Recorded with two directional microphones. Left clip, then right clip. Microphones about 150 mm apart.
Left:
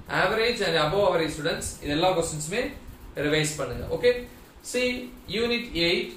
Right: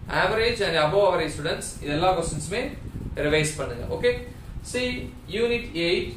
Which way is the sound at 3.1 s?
30° right (ahead or behind).